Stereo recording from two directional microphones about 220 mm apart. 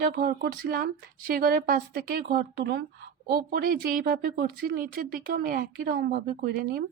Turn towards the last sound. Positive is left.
turn(degrees=-40)  # may be behind; listen again after turning